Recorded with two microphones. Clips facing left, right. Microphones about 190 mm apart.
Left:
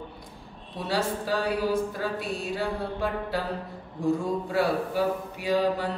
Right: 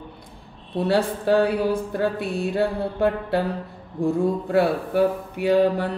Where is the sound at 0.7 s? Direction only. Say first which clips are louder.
Right 7 dB; 60° right (ahead or behind).